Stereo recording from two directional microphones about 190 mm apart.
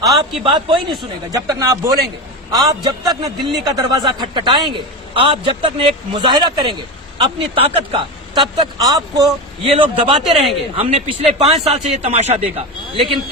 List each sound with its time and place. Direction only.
0.0 s a man's voice: centre (ahead or behind)
0.4 s a man's voice: 25° right (ahead or behind)